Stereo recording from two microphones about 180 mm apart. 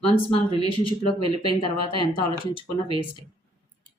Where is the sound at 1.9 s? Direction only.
30° right (ahead or behind).